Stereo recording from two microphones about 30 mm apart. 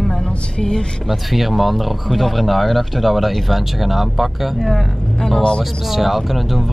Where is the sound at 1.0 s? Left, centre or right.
Centre.